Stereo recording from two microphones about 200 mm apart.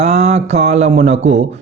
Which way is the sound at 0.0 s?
35° right (ahead or behind).